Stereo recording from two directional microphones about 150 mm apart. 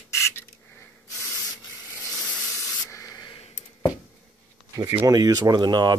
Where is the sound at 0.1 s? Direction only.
15° left (ahead or behind).